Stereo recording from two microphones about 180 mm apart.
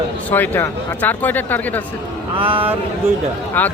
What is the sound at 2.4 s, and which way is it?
Speech, 30° right (ahead or behind).